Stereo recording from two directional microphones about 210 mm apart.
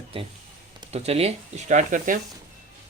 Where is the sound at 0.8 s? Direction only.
30° right (ahead or behind).